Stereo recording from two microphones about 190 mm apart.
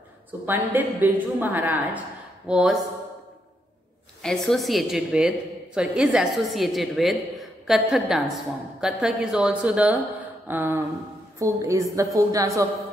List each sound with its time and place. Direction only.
0.5 s a woman's voice: 10° right (ahead or behind)
4.2 s a woman's voice: centre (ahead or behind); by 12.6 s 15° right (ahead or behind)